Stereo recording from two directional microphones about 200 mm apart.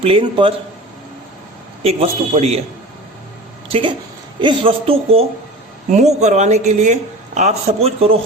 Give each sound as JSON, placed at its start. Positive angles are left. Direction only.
{"t": 0.0, "sound": "a woman's voice", "side_deg": -25}
{"t": 1.8, "sound": "speech", "side_deg": -30}
{"t": 3.7, "sound": "a woman's voice", "side_deg": -25}